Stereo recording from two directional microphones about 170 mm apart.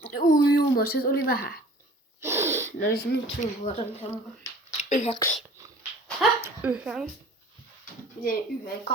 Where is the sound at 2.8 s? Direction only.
65° left (ahead or behind).